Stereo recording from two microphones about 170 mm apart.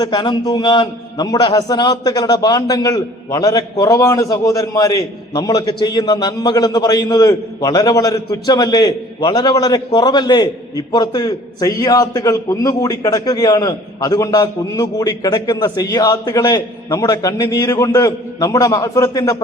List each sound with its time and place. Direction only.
0.0 s a man's voice: 25° left (ahead or behind)